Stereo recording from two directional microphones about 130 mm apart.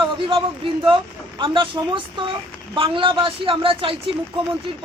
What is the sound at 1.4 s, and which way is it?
A woman's voice, 40° right (ahead or behind).